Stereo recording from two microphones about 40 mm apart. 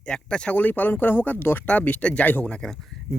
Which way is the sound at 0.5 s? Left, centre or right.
Left.